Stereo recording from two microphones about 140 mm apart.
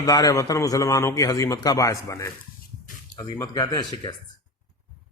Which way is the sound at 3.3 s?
25° left (ahead or behind).